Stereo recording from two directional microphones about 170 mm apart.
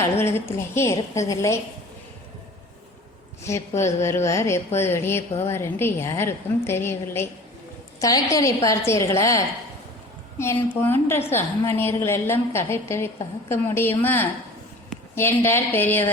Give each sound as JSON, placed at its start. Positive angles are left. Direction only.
{"t": 0.0, "sound": "a woman's voice", "side_deg": 15}
{"t": 3.8, "sound": "a woman's voice", "side_deg": 15}